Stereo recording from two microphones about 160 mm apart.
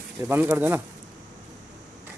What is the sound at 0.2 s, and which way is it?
Speech, 15° right (ahead or behind).